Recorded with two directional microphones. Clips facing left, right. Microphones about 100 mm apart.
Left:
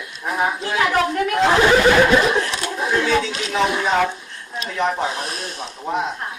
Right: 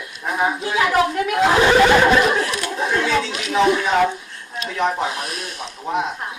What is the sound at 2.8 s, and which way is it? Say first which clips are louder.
Chatter: left 1 dB; centre (ahead or behind).